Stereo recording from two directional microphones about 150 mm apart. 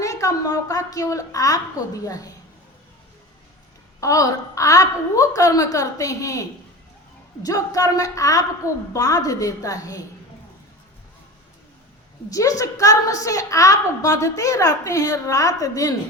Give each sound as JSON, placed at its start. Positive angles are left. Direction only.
{"t": 0.0, "sound": "a woman's voice", "side_deg": 20}
{"t": 4.0, "sound": "a woman's voice", "side_deg": 20}
{"t": 7.4, "sound": "a woman's voice", "side_deg": 25}
{"t": 12.3, "sound": "a woman's voice", "side_deg": 20}